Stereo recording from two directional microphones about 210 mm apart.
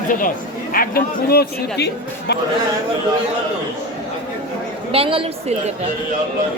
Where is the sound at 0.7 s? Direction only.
45° left (ahead or behind).